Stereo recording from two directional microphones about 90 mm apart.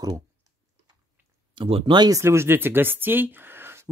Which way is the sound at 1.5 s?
65° right (ahead or behind).